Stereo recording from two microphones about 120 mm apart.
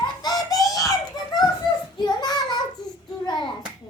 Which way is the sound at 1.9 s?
35° left (ahead or behind).